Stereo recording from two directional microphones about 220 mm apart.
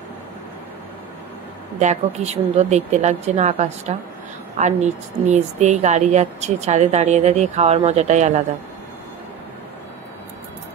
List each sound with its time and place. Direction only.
1.8 s speech: 30° right (ahead or behind)